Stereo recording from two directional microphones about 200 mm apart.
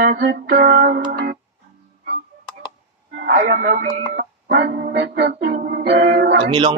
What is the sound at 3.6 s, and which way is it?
Music, 45° right (ahead or behind).